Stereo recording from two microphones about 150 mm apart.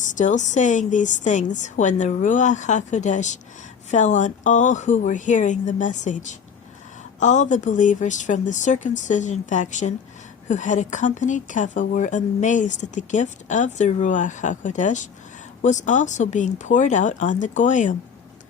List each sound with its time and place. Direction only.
0.0 s speech: 55° left (ahead or behind)